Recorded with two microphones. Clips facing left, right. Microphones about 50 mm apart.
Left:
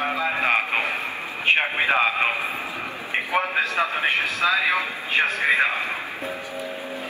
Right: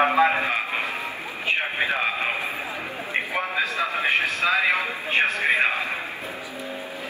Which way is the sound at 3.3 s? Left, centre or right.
Left.